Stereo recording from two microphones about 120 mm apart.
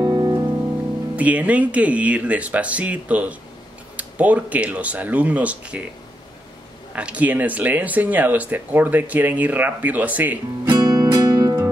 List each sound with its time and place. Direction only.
0.0 s music: 30° right (ahead or behind)
1.1 s speech: 10° right (ahead or behind)
7.0 s speech: 10° right (ahead or behind)
10.7 s music: 35° right (ahead or behind)